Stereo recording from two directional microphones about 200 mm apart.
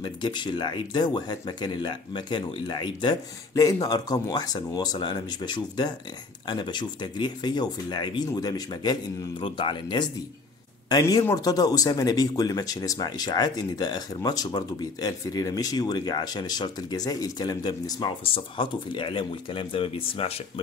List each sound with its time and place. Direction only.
0.0 s speech: 20° left (ahead or behind)